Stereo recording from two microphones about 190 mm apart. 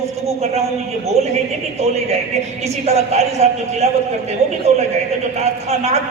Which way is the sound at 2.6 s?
35° right (ahead or behind).